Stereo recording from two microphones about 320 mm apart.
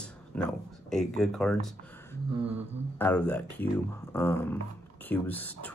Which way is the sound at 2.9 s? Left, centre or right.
Centre.